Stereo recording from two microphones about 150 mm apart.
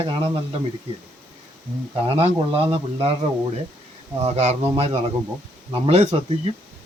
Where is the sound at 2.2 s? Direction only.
40° right (ahead or behind).